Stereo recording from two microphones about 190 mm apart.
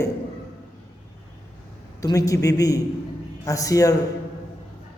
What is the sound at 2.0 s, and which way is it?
A man's voice, 15° left (ahead or behind).